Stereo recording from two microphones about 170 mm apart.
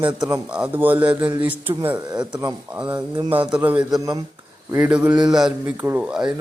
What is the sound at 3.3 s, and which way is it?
Speech, 10° right (ahead or behind).